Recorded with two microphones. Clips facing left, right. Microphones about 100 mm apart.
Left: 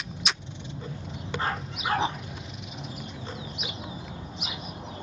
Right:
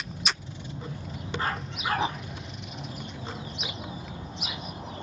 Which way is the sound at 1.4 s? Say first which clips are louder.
Left 1 dB; 25° left (ahead or behind).